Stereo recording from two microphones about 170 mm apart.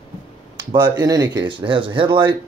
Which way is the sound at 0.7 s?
25° right (ahead or behind).